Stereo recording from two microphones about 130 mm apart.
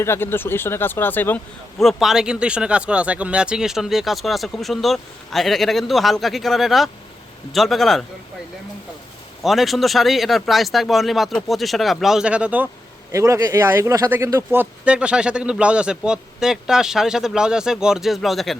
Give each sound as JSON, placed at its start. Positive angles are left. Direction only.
{"t": 0.0, "sound": "speech", "side_deg": 20}
{"t": 1.8, "sound": "speech", "side_deg": 0}
{"t": 9.4, "sound": "speech", "side_deg": 0}
{"t": 13.1, "sound": "speech", "side_deg": -25}